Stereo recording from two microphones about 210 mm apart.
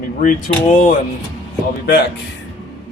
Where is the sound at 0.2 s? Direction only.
40° left (ahead or behind).